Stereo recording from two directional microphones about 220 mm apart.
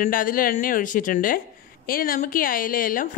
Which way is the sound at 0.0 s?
40° left (ahead or behind).